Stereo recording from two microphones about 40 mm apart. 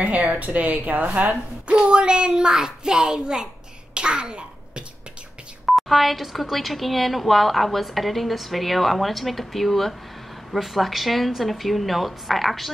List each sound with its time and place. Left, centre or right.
0.0 s a child's voice: right; by 3.4 s centre
3.9 s babbling: right
5.7 s speech: centre